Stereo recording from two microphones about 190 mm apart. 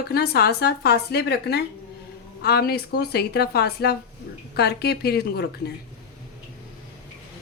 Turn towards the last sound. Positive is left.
turn(degrees=55)  # may be behind; listen again after turning